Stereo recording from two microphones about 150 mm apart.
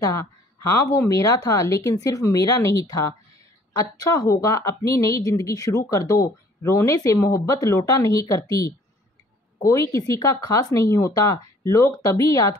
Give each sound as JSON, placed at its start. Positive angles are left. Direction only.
{"t": 0.0, "sound": "a woman's voice", "side_deg": 25}